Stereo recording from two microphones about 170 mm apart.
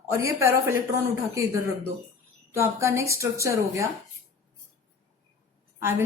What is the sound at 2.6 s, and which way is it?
Speech, 15° right (ahead or behind).